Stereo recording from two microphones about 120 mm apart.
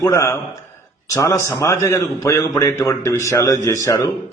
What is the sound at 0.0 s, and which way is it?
A man's voice, 25° left (ahead or behind).